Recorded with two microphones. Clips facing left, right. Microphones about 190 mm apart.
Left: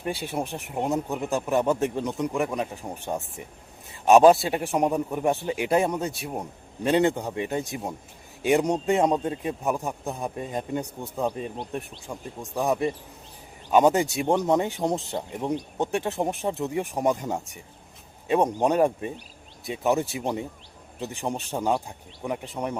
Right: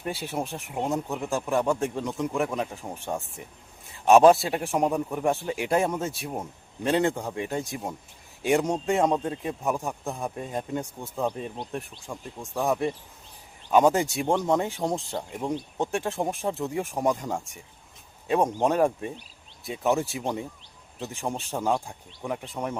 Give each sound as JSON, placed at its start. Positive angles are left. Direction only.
{"t": 0.0, "sound": "speech", "side_deg": 0}
{"t": 1.5, "sound": "a man's voice", "side_deg": 20}
{"t": 2.1, "sound": "speech", "side_deg": 0}
{"t": 18.3, "sound": "speech", "side_deg": 0}